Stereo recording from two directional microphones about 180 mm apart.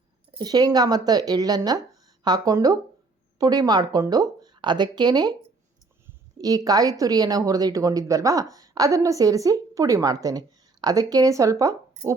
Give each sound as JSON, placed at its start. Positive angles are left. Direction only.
{"t": 0.3, "sound": "a woman's voice", "side_deg": -25}
{"t": 6.4, "sound": "a woman's voice", "side_deg": -20}